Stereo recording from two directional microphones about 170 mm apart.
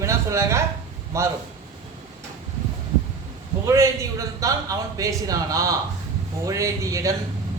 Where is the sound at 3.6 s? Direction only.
20° right (ahead or behind).